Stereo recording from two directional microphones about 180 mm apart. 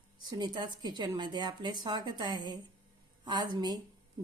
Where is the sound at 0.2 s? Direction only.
25° right (ahead or behind).